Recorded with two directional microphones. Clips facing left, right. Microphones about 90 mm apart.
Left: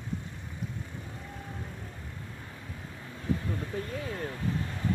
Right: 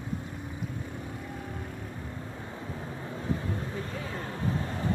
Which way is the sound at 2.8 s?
30° right (ahead or behind).